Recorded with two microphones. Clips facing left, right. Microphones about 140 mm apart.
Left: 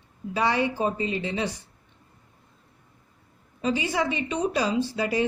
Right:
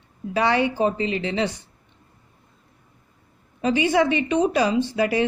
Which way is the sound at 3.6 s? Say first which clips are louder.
Right 6 dB; 70° right (ahead or behind).